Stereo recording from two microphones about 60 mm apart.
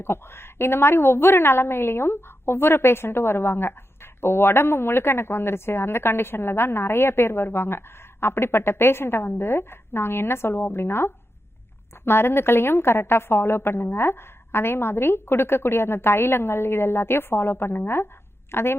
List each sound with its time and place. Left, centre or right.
0.0 s a woman's voice: left